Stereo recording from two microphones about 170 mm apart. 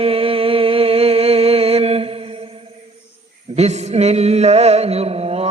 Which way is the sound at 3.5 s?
40° right (ahead or behind).